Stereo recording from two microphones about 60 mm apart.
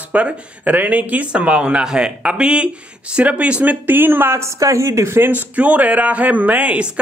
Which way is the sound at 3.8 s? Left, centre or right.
Right.